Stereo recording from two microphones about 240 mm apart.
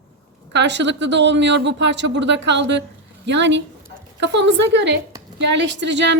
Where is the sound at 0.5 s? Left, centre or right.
Right.